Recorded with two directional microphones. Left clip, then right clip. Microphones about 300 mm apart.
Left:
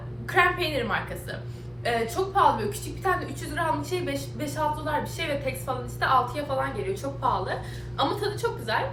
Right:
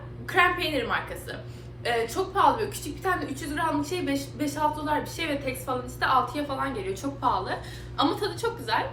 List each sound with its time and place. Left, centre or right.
0.3 s a woman's voice: centre